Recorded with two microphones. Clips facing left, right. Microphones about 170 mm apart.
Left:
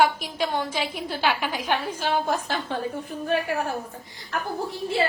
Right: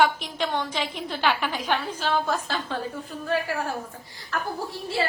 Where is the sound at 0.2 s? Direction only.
10° left (ahead or behind).